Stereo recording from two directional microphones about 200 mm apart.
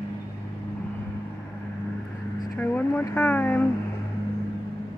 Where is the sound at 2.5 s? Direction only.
10° left (ahead or behind).